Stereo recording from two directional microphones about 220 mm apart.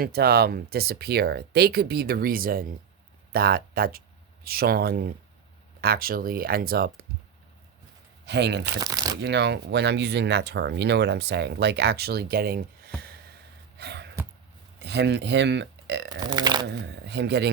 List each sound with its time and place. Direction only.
0.0 s speech: 45° right (ahead or behind)
8.3 s speech: 50° right (ahead or behind)
8.8 s speech: 15° right (ahead or behind)
9.2 s speech: 50° right (ahead or behind)
13.7 s gasp: 50° right (ahead or behind)
14.8 s speech: 50° right (ahead or behind)
16.2 s speech: 20° right (ahead or behind)
16.6 s speech: 50° right (ahead or behind)